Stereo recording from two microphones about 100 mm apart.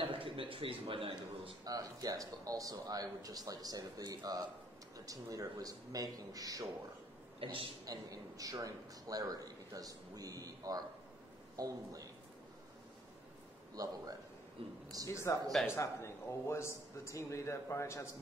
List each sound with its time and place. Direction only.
0.0 s a man's voice: 60° right (ahead or behind)
1.6 s speech: 40° right (ahead or behind)
7.4 s a man's voice: 60° right (ahead or behind)
7.8 s a man's voice: 35° right (ahead or behind)
13.8 s speech: 40° right (ahead or behind)
14.6 s a man's voice: 70° right (ahead or behind)
15.0 s a man's voice: 30° left (ahead or behind)